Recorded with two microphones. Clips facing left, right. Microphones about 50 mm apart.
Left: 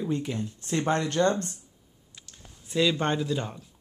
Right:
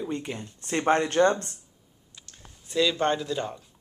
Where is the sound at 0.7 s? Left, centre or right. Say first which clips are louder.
Right 3 dB; right.